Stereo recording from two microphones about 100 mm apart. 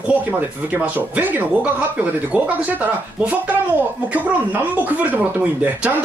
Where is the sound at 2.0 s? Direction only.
15° right (ahead or behind).